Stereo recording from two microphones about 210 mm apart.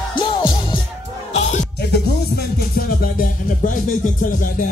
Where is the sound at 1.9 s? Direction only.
50° left (ahead or behind).